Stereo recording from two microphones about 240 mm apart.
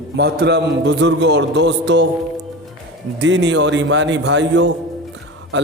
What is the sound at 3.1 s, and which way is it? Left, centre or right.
A man's voice, right.